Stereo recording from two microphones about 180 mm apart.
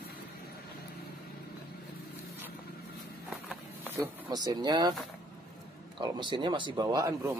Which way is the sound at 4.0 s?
25° right (ahead or behind).